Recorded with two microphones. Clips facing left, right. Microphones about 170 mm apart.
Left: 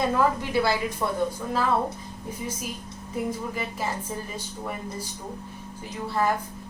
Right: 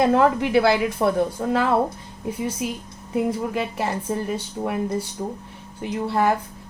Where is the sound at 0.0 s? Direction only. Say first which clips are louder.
Right 6 dB; 70° right (ahead or behind).